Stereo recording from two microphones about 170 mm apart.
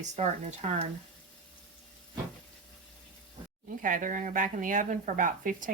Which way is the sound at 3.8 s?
50° right (ahead or behind).